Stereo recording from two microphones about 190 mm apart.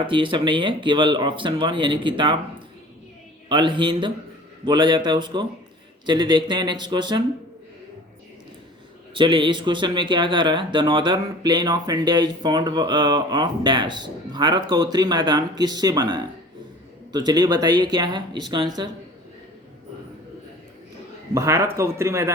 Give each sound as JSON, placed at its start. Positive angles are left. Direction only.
{"t": 0.1, "sound": "speech", "side_deg": -25}
{"t": 3.5, "sound": "speech", "side_deg": -25}
{"t": 9.1, "sound": "speech", "side_deg": -25}
{"t": 21.3, "sound": "speech", "side_deg": -15}